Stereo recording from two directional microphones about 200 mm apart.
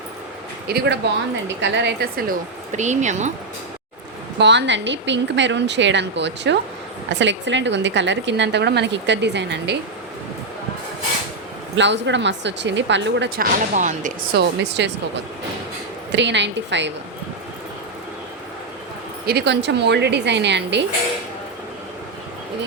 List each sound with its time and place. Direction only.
0.7 s speech: 50° right (ahead or behind)
1.5 s speech: 60° right (ahead or behind); by 3.3 s 35° right (ahead or behind)
4.4 s a woman's voice: 60° right (ahead or behind)
11.8 s a woman's voice: 60° right (ahead or behind); by 14.1 s 40° right (ahead or behind)
14.3 s a woman's voice: 60° right (ahead or behind)
19.2 s a woman's voice: 50° right (ahead or behind)